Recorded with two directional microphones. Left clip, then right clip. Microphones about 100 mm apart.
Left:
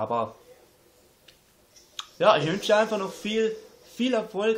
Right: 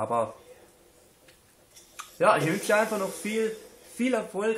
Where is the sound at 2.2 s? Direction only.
10° left (ahead or behind).